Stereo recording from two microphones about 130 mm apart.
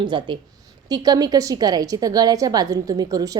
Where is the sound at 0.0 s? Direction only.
35° right (ahead or behind).